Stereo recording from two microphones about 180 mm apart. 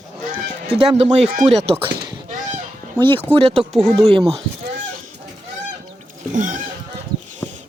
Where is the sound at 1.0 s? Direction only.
40° right (ahead or behind).